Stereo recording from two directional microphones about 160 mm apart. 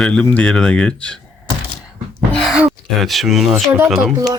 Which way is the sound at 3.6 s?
15° right (ahead or behind).